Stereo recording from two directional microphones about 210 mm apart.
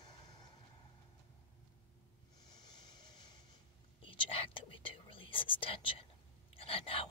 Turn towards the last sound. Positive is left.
turn(degrees=25)  # may be behind; listen again after turning